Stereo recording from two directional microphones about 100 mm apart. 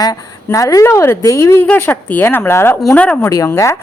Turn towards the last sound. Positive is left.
turn(degrees=35)  # may be behind; listen again after turning